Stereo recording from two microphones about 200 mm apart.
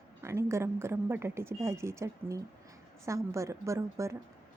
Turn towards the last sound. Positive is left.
turn(degrees=-15)  # may be behind; listen again after turning